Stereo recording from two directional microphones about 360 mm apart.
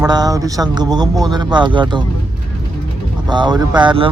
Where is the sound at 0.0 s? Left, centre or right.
Centre.